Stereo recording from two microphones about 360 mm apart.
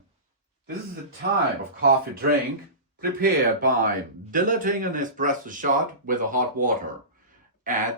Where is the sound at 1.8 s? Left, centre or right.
Right.